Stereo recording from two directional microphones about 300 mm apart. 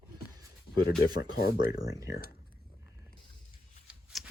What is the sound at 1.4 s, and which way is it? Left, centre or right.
Speech, left.